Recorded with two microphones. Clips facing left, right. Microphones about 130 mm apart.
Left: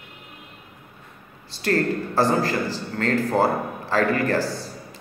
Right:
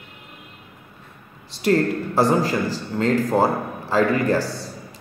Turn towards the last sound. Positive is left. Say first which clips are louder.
# right 2 dB
turn(degrees=-20)  # may be behind; listen again after turning